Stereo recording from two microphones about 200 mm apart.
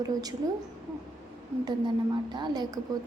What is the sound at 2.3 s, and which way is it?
Speech, 20° right (ahead or behind).